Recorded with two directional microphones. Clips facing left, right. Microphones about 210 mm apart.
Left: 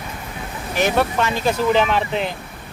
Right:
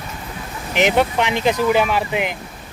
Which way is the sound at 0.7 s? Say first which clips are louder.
Right 2 dB; 20° right (ahead or behind).